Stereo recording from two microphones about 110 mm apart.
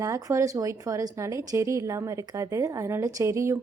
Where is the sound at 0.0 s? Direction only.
30° right (ahead or behind).